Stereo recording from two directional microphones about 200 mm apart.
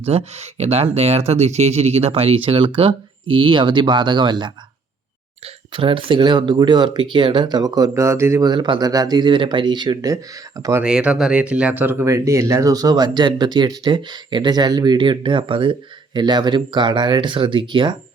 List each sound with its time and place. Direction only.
0.0 s speech: 30° right (ahead or behind)
5.7 s speech: 25° right (ahead or behind)